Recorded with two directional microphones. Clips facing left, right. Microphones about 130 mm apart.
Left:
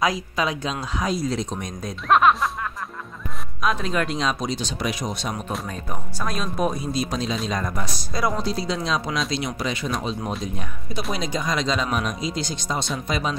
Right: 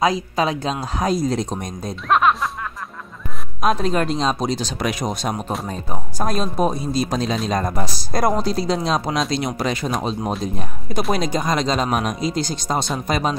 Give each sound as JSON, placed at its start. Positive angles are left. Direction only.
{"t": 0.0, "sound": "speech", "side_deg": -30}
{"t": 2.0, "sound": "speech", "side_deg": 0}
{"t": 3.6, "sound": "speech", "side_deg": -35}